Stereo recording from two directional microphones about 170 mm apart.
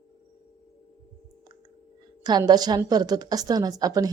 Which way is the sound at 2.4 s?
25° right (ahead or behind).